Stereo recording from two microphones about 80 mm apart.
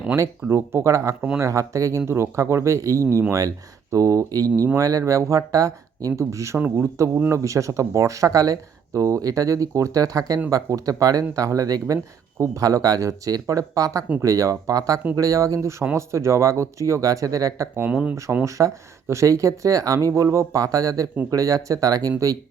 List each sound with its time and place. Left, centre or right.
0.4 s speech: right
6.6 s a man's voice: right
7.2 s speech: right
17.8 s speech: centre
18.4 s speech: right